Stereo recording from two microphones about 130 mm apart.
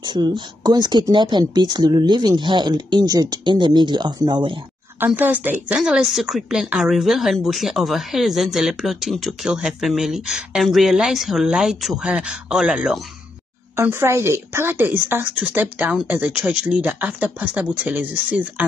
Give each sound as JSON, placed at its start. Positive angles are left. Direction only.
{"t": 0.0, "sound": "speech", "side_deg": -35}
{"t": 5.0, "sound": "a woman's voice", "side_deg": -15}
{"t": 13.7, "sound": "a woman's voice", "side_deg": -20}